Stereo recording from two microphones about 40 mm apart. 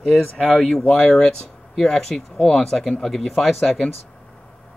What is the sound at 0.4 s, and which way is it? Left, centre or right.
Speech, left.